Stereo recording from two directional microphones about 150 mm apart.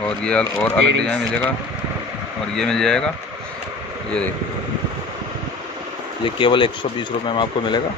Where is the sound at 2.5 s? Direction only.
5° left (ahead or behind).